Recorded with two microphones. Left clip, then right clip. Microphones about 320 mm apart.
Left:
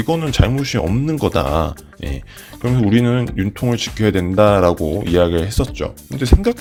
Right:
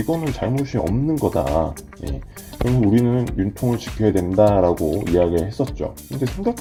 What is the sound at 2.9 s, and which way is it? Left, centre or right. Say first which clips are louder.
Speech: left 2 dB; left.